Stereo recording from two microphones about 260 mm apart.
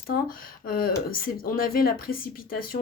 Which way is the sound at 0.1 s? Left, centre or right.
Left.